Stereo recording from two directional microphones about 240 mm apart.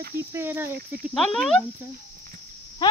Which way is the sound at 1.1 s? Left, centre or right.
Centre.